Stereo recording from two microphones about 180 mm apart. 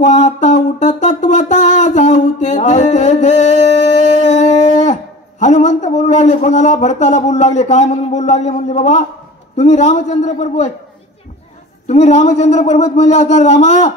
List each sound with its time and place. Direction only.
0.0 s a sound: 40° left (ahead or behind)
9.6 s a man's voice: 40° left (ahead or behind)
11.9 s a man's voice: 40° left (ahead or behind)